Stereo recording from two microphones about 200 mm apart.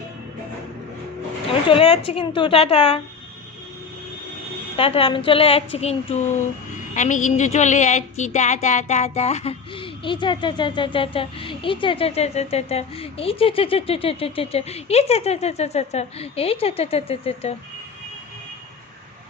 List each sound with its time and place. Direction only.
1.5 s speech: 25° left (ahead or behind)
4.8 s a woman's voice: 30° left (ahead or behind)